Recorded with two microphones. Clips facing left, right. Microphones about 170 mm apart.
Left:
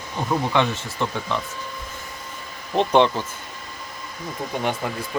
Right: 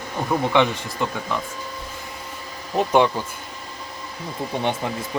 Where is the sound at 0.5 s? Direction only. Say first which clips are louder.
Right 4 dB; 15° right (ahead or behind).